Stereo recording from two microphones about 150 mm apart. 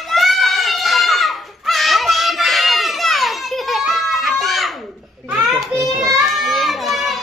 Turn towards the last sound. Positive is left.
turn(degrees=0)  # may be behind; listen again after turning